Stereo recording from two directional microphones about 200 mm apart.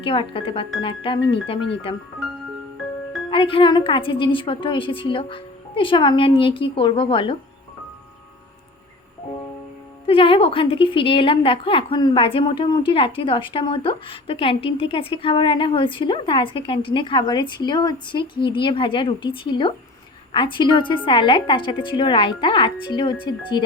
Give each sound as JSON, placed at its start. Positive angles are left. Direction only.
{"t": 0.0, "sound": "a woman's voice", "side_deg": 25}
{"t": 3.2, "sound": "a woman's voice", "side_deg": 25}
{"t": 10.1, "sound": "a woman's voice", "side_deg": 25}